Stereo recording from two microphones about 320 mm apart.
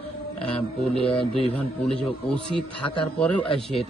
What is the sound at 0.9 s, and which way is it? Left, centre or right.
Speech, centre.